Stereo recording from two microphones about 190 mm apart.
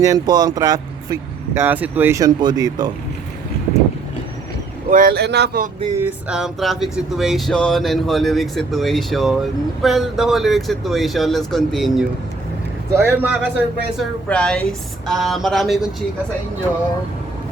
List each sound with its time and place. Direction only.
0.0 s speech: 20° right (ahead or behind)
4.9 s speech: 45° right (ahead or behind)
6.0 s speech: 5° right (ahead or behind)
12.9 s a man's voice: 10° right (ahead or behind)
14.0 s speech: 5° left (ahead or behind)